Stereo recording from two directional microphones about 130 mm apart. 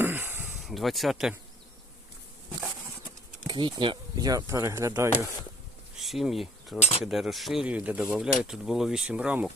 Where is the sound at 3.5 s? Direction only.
35° right (ahead or behind); by 5.1 s 20° right (ahead or behind).